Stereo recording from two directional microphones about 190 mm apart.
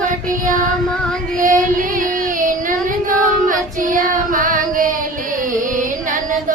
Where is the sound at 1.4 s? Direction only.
45° right (ahead or behind).